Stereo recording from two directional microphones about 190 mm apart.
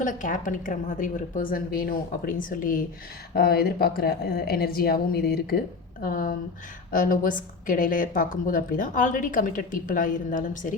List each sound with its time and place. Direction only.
0.0 s a woman's voice: 45° left (ahead or behind)